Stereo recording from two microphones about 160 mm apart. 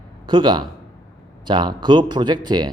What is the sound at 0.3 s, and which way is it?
Speech, 30° right (ahead or behind).